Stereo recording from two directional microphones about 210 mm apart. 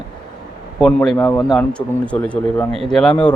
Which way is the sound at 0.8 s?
5° left (ahead or behind).